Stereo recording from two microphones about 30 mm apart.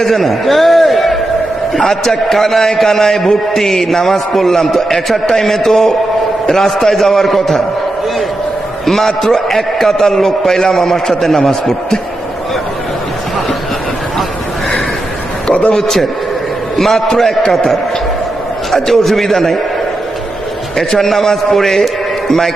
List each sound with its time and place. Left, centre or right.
0.0 s a man's voice: centre
8.9 s a man's voice: centre
15.7 s a man's voice: centre
18.7 s a man's voice: centre
21.1 s a man's voice: centre